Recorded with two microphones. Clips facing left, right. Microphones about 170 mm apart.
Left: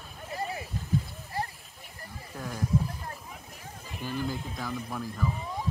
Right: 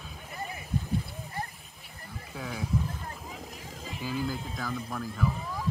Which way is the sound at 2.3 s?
5° right (ahead or behind).